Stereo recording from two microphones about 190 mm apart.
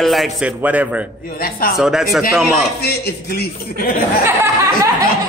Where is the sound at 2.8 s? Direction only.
55° left (ahead or behind).